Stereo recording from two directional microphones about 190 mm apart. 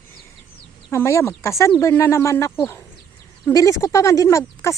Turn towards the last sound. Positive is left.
turn(degrees=15)  # may be behind; listen again after turning